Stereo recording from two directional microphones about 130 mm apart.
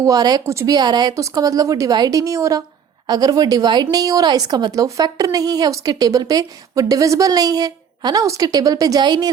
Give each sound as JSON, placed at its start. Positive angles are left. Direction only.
{"t": 0.0, "sound": "speech", "side_deg": -30}